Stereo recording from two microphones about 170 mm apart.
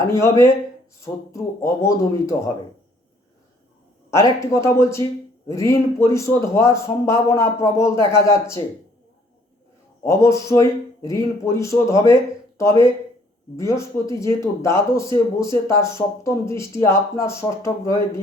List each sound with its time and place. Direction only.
0.1 s speech: 15° left (ahead or behind)
4.1 s speech: 15° left (ahead or behind)
10.0 s speech: 15° left (ahead or behind)